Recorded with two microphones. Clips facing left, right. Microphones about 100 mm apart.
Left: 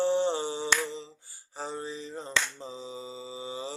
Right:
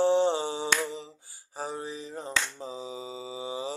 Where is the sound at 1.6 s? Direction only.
10° right (ahead or behind).